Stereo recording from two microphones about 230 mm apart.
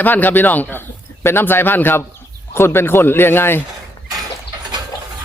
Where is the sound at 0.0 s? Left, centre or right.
Centre.